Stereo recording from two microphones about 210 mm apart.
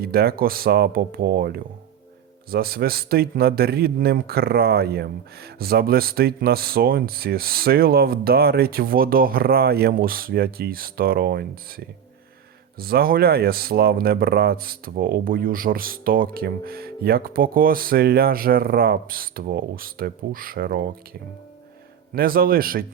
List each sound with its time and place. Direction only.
0.0 s a man's voice: 45° right (ahead or behind)
12.7 s a man's voice: 45° right (ahead or behind)
22.1 s a man's voice: 45° right (ahead or behind)